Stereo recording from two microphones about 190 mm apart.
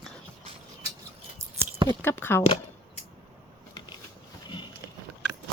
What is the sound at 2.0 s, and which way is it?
Speech, 10° left (ahead or behind).